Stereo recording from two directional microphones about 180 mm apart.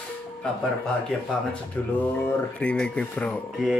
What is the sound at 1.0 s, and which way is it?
Speech, 5° left (ahead or behind).